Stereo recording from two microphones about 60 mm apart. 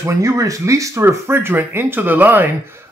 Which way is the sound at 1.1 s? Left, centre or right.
Right.